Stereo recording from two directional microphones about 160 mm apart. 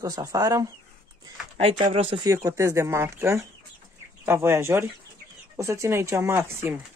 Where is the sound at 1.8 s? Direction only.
35° right (ahead or behind).